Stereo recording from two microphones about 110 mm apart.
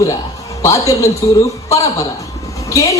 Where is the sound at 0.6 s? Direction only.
30° left (ahead or behind).